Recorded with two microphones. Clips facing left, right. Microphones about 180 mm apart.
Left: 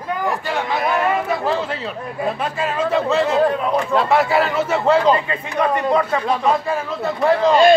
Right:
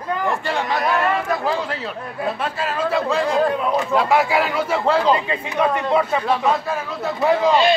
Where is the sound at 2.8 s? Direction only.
10° right (ahead or behind).